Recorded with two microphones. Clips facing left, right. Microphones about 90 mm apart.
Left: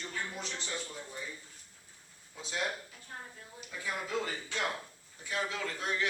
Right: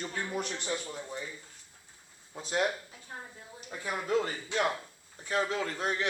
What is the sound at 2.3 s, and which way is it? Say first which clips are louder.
Speech: right 7 dB; 45° right (ahead or behind).